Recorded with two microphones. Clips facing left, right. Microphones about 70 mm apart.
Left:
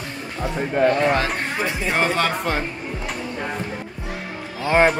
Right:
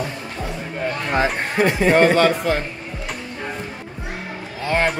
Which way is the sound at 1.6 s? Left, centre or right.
Right.